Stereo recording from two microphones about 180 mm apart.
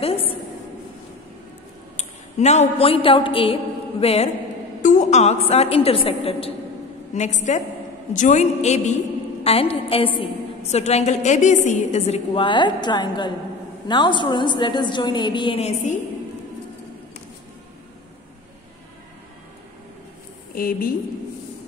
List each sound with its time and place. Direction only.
0.0 s a sound: 30° left (ahead or behind)
2.0 s a woman's voice: 40° left (ahead or behind)
20.5 s a woman's voice: 55° left (ahead or behind)